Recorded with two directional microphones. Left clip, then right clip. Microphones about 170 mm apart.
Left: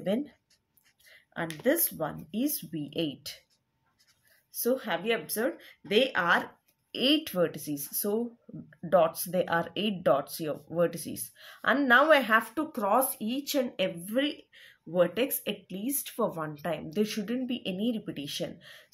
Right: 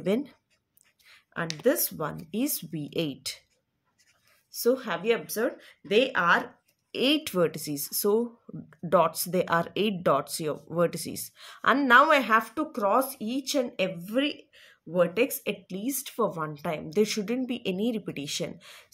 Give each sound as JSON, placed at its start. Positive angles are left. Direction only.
{"t": 0.0, "sound": "speech", "side_deg": -40}
{"t": 1.0, "sound": "a sound", "side_deg": -40}
{"t": 2.0, "sound": "speech", "side_deg": -40}
{"t": 4.5, "sound": "speech", "side_deg": -35}
{"t": 6.9, "sound": "speech", "side_deg": -35}
{"t": 17.0, "sound": "speech", "side_deg": -40}